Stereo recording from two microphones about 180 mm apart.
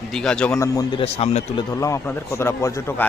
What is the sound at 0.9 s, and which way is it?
A man's voice, 35° left (ahead or behind).